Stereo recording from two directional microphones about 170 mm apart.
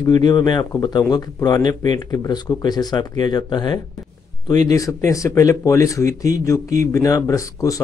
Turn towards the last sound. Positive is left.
turn(degrees=20)  # may be behind; listen again after turning